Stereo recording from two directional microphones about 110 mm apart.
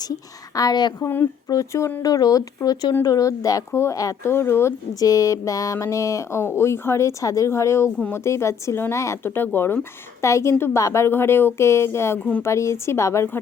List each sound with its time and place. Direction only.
0.5 s speech: 35° left (ahead or behind)
0.9 s speech: 20° left (ahead or behind)